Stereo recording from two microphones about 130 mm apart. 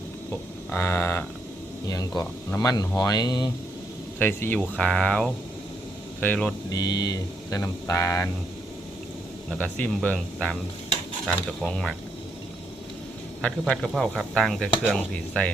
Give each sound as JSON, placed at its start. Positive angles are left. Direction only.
{"t": 0.3, "sound": "a sound", "side_deg": 20}
{"t": 1.9, "sound": "speech", "side_deg": 30}
{"t": 4.2, "sound": "speech", "side_deg": 15}
{"t": 6.7, "sound": "speech", "side_deg": 30}
{"t": 9.7, "sound": "speech", "side_deg": 10}
{"t": 13.4, "sound": "speech", "side_deg": 5}